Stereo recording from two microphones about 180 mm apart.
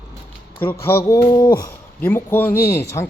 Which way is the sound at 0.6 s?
10° left (ahead or behind).